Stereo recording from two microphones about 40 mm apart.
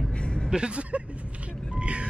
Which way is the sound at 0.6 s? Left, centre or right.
Right.